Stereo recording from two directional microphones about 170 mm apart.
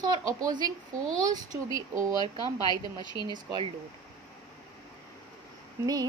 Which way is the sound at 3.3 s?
25° right (ahead or behind).